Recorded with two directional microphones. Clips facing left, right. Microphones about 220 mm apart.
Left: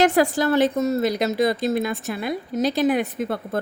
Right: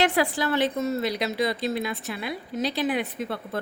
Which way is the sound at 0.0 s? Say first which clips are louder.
Left 5 dB; 45° left (ahead or behind).